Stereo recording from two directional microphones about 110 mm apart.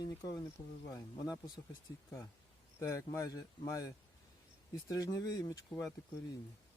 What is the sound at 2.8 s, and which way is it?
Speech, 25° left (ahead or behind).